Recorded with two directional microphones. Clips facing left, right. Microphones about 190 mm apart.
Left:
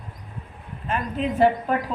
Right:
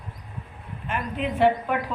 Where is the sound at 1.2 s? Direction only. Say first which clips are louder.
Left 1 dB; 40° left (ahead or behind).